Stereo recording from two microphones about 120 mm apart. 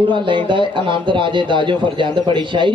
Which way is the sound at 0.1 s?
40° right (ahead or behind).